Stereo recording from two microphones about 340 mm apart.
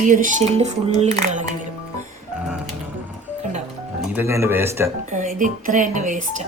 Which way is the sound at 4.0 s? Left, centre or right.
Centre.